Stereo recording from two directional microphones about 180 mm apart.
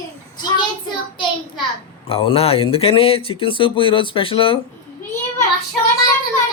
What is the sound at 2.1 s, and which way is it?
Speech, 30° left (ahead or behind).